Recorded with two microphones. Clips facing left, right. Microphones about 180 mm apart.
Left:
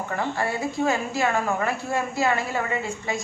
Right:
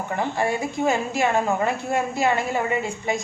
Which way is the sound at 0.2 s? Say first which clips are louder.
Right 3 dB; 20° right (ahead or behind).